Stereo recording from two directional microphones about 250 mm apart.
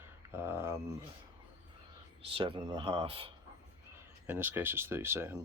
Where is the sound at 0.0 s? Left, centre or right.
Centre.